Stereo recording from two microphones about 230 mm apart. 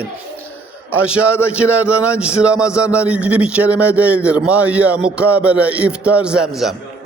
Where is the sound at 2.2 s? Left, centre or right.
Centre.